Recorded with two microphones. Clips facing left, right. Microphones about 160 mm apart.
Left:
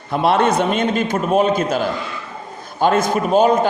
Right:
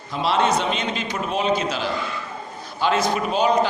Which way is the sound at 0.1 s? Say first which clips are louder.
Left 5 dB; 55° left (ahead or behind).